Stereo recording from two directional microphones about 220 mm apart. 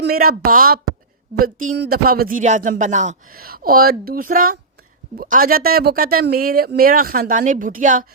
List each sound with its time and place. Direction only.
0.0 s speech: 45° right (ahead or behind)